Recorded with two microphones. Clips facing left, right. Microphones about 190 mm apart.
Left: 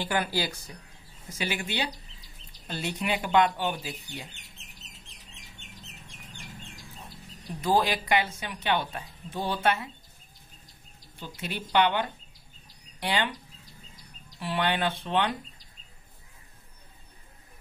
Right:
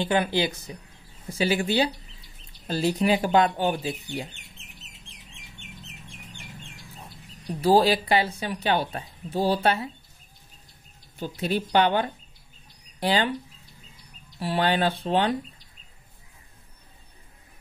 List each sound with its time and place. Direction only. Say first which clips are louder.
0.0 s speech: right 5 dB; 25° right (ahead or behind)
1.4 s speech: right 9 dB; 35° right (ahead or behind)
7.6 s speech: right 6 dB; 35° right (ahead or behind)
11.1 s speech: right 9 dB; 40° right (ahead or behind)
14.4 s speech: right 4 dB; 35° right (ahead or behind)